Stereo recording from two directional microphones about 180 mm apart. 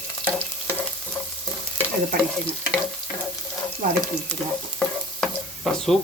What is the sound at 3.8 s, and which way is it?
Speech, 50° right (ahead or behind).